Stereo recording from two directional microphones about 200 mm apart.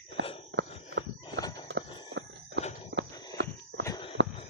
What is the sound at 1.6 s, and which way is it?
Clip-clop, 65° right (ahead or behind).